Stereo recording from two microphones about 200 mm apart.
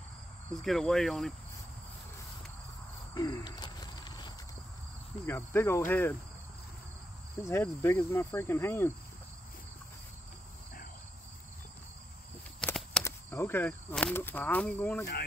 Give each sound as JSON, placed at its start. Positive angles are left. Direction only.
{"t": 0.5, "sound": "cricket", "side_deg": 0}
{"t": 3.2, "sound": "a sound", "side_deg": 20}
{"t": 5.2, "sound": "cricket", "side_deg": 10}
{"t": 7.4, "sound": "cricket", "side_deg": 10}
{"t": 12.5, "sound": "a sound", "side_deg": 5}
{"t": 13.0, "sound": "speech", "side_deg": 10}